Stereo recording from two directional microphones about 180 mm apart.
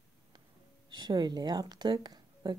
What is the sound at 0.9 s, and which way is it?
Speech, 25° right (ahead or behind).